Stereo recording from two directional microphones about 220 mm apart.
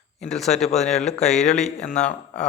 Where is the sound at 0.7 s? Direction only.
30° left (ahead or behind).